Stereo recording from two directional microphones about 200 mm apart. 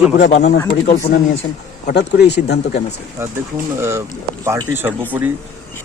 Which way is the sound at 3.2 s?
15° right (ahead or behind).